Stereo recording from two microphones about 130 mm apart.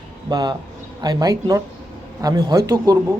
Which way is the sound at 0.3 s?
35° right (ahead or behind).